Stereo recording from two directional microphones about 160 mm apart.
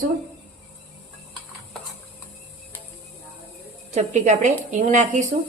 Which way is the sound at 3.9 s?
45° right (ahead or behind).